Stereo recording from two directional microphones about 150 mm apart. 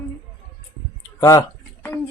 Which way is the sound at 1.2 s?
25° left (ahead or behind).